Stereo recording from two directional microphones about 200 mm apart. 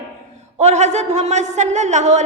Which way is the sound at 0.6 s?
35° right (ahead or behind).